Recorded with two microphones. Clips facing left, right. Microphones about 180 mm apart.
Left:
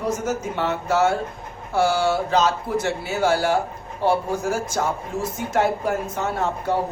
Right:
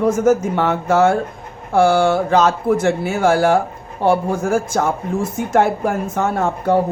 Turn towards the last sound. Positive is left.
turn(degrees=-50)  # may be behind; listen again after turning